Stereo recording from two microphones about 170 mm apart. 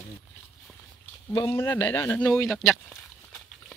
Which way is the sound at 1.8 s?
30° left (ahead or behind).